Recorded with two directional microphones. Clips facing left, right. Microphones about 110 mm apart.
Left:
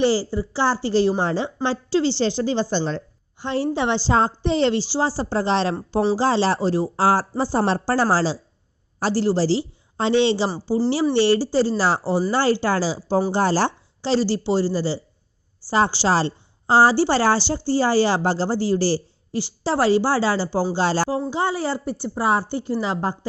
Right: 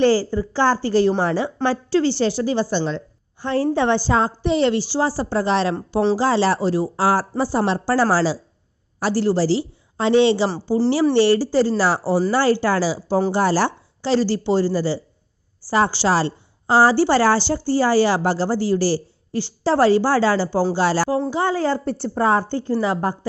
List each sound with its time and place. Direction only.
0.1 s a woman's voice: 15° left (ahead or behind); by 3.0 s 35° left (ahead or behind)
3.4 s a woman's voice: 20° left (ahead or behind)
4.1 s a woman's voice: 30° left (ahead or behind)
21.8 s a woman's voice: 5° left (ahead or behind); by 23.1 s 20° left (ahead or behind)